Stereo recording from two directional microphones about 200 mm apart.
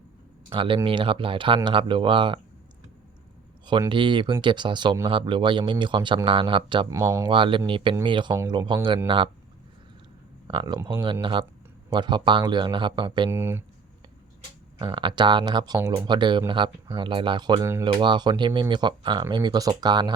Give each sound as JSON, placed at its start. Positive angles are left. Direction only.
{"t": 0.5, "sound": "speech", "side_deg": -25}
{"t": 3.7, "sound": "speech", "side_deg": -25}
{"t": 7.0, "sound": "speech", "side_deg": -15}
{"t": 7.3, "sound": "speech", "side_deg": -25}
{"t": 10.4, "sound": "speech", "side_deg": -25}
{"t": 13.3, "sound": "speech", "side_deg": -10}
{"t": 14.8, "sound": "speech", "side_deg": -25}